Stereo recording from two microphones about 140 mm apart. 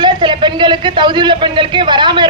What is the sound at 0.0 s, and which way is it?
A man's voice, 35° right (ahead or behind).